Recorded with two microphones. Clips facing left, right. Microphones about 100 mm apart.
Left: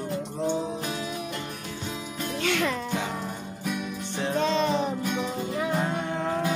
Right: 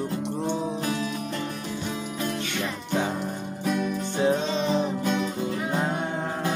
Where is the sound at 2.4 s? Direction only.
90° left.